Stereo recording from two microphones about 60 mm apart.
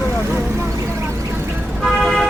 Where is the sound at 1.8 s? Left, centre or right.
Centre.